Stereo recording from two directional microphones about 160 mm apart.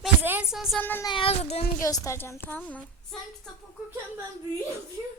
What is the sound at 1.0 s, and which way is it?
Child singing, 35° left (ahead or behind).